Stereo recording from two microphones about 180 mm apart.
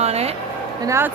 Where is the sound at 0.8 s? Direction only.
15° right (ahead or behind).